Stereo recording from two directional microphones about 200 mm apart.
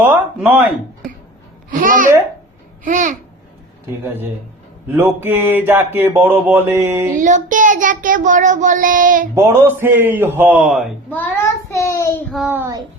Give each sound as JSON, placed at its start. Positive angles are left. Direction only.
{"t": 0.0, "sound": "speech", "side_deg": -10}
{"t": 1.7, "sound": "child singing", "side_deg": -40}
{"t": 4.0, "sound": "a man's voice", "side_deg": -10}
{"t": 7.2, "sound": "child singing", "side_deg": -40}
{"t": 9.3, "sound": "a man's voice", "side_deg": -10}
{"t": 12.3, "sound": "a man's voice", "side_deg": -5}